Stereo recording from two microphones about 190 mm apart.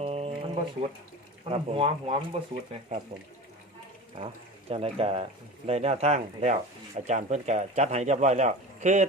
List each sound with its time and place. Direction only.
0.0 s music: 35° right (ahead or behind)
1.5 s speech: 30° right (ahead or behind)
4.7 s speech: 30° right (ahead or behind)